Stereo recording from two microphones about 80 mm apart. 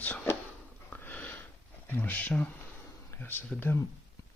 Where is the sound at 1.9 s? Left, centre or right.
Left.